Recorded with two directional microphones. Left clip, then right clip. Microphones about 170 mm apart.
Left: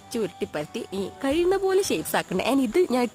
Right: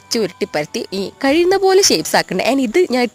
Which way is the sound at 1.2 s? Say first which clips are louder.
Right 10 dB; 30° right (ahead or behind).